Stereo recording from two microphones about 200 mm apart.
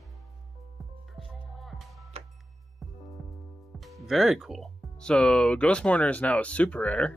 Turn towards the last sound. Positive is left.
turn(degrees=5)  # may be behind; listen again after turning